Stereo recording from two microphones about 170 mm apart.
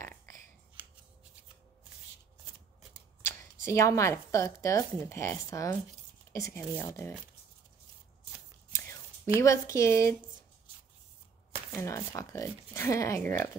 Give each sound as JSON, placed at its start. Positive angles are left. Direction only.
{"t": 0.0, "sound": "a sound", "side_deg": 15}
{"t": 3.6, "sound": "speech", "side_deg": 20}
{"t": 8.7, "sound": "whispering", "side_deg": 15}
{"t": 9.4, "sound": "speech", "side_deg": 20}
{"t": 11.7, "sound": "speech", "side_deg": 15}